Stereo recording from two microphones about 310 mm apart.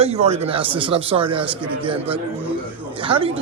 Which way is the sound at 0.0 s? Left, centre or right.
Centre.